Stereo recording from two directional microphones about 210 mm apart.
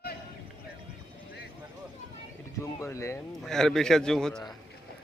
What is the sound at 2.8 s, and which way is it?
Speech, 15° left (ahead or behind).